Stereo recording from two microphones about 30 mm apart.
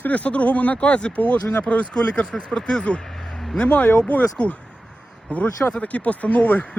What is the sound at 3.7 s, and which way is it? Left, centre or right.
Speech, left.